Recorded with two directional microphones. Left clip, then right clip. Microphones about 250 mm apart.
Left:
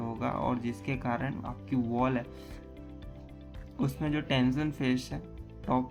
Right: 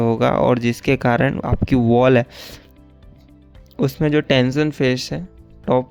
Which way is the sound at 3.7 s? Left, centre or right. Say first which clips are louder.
Right 15 dB; right.